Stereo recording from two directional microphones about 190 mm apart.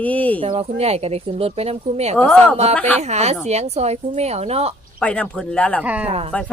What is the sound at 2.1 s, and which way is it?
Speech, 5° left (ahead or behind).